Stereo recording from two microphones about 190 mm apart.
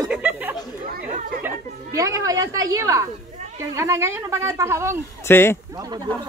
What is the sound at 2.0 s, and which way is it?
A woman's voice, 15° right (ahead or behind).